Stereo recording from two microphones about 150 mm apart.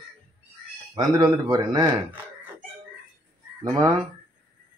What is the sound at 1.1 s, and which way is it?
Speech, 25° right (ahead or behind).